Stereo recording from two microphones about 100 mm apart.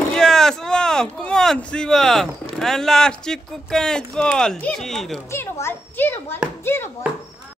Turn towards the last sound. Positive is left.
turn(degrees=25)  # may be behind; listen again after turning